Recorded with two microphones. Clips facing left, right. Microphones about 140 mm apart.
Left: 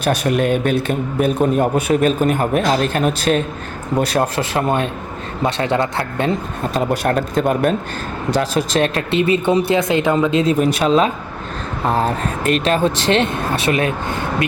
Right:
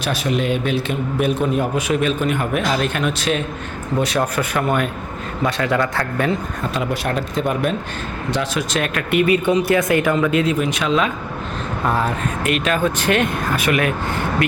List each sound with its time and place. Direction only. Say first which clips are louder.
0.0 s speech: left 4 dB; 55° left (ahead or behind); by 6.7 s 25° left (ahead or behind)
6.7 s speech: left 5 dB; 45° left (ahead or behind)